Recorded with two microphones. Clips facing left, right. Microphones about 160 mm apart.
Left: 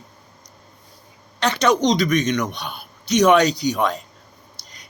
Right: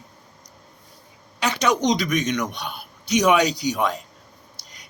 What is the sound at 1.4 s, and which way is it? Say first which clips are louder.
A man's voice: left 3 dB; 10° right (ahead or behind).